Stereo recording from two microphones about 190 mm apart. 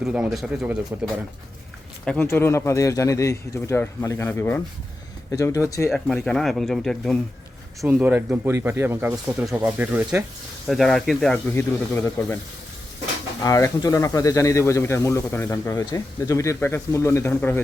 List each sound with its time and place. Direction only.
0.0 s speech: centre (ahead or behind)
2.0 s speech: 10° left (ahead or behind)
5.9 s speech: centre (ahead or behind)
7.9 s speech: 10° right (ahead or behind)
11.5 s speech: 15° left (ahead or behind)
13.4 s speech: 15° left (ahead or behind)